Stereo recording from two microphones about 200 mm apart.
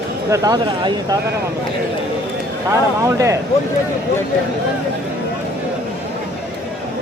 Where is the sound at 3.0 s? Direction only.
15° right (ahead or behind).